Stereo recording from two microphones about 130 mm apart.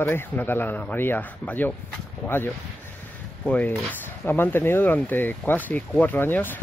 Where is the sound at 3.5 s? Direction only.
10° left (ahead or behind).